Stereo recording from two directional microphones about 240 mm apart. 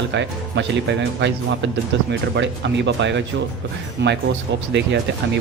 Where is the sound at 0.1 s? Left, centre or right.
Right.